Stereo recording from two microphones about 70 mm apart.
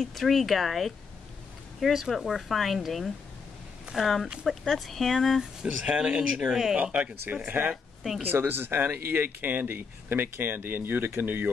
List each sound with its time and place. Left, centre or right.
0.0 s speech: centre
5.6 s speech: centre
6.8 s speech: right